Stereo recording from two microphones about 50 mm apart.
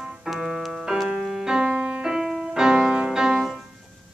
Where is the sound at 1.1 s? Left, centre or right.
Centre.